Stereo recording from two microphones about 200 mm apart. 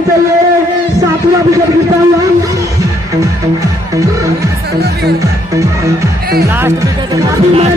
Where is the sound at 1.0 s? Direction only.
15° right (ahead or behind).